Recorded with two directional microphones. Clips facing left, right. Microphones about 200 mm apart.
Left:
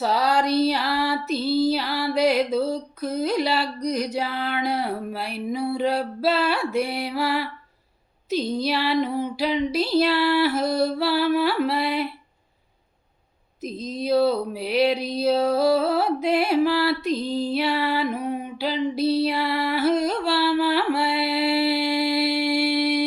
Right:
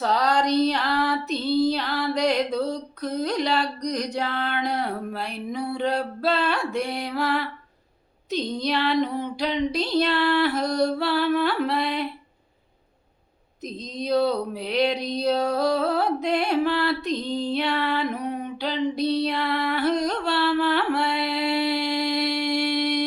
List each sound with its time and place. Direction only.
0.0 s female singing: 5° left (ahead or behind)
8.3 s a sound: 5° left (ahead or behind)
13.6 s female singing: 5° left (ahead or behind)